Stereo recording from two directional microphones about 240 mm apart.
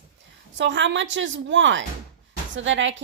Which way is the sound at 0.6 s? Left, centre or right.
Right.